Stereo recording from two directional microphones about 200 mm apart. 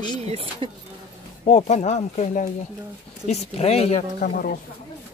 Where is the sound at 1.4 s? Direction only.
30° left (ahead or behind).